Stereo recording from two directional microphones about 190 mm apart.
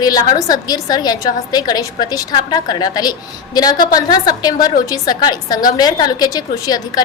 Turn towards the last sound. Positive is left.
turn(degrees=20)  # may be behind; listen again after turning